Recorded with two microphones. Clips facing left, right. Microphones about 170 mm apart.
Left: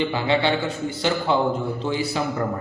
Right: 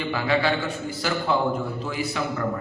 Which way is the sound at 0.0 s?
25° left (ahead or behind).